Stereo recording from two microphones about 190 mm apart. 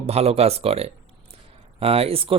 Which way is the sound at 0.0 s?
35° right (ahead or behind).